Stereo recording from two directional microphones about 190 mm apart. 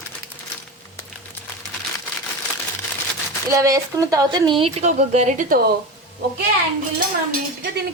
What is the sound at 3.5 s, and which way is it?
Speech, 20° right (ahead or behind).